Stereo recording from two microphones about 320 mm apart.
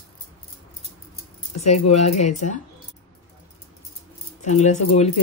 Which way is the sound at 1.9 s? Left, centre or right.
Centre.